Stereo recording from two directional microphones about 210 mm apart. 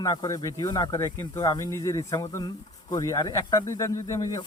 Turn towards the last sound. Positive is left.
turn(degrees=15)  # may be behind; listen again after turning